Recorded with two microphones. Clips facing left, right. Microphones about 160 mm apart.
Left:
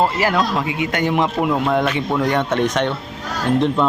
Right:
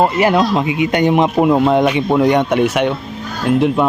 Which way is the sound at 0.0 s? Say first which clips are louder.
Right 5 dB; 20° right (ahead or behind).